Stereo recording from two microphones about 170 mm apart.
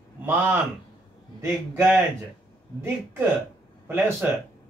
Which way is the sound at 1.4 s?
15° right (ahead or behind).